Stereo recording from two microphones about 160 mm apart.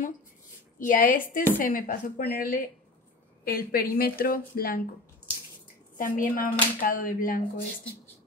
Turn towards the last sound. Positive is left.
turn(degrees=60)  # may be behind; listen again after turning